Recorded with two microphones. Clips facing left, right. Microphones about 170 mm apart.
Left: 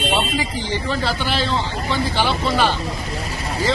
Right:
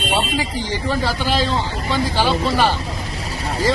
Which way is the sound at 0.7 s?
15° right (ahead or behind).